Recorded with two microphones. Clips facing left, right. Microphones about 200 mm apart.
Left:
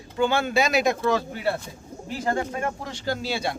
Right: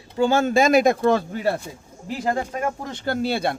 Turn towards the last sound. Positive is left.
turn(degrees=-55)  # may be behind; listen again after turning